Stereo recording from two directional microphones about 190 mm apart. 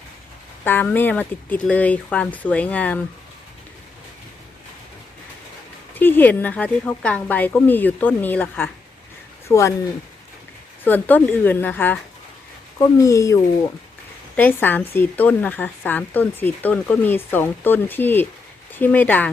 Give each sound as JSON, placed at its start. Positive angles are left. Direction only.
{"t": 0.6, "sound": "speech", "side_deg": 10}
{"t": 5.9, "sound": "speech", "side_deg": 10}
{"t": 10.8, "sound": "speech", "side_deg": 10}